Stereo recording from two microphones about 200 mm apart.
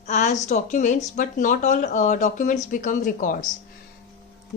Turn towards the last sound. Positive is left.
turn(degrees=40)  # may be behind; listen again after turning